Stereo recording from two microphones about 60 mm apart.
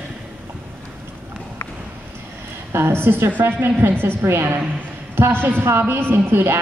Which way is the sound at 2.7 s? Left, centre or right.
Right.